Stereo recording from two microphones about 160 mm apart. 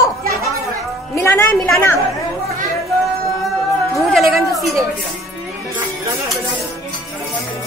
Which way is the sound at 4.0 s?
Centre (ahead or behind).